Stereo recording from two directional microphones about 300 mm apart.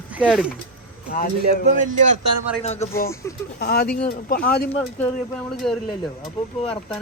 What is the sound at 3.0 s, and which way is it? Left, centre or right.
Speech, centre.